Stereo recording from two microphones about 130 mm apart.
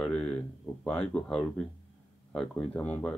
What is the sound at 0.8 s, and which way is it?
Speech, 5° left (ahead or behind).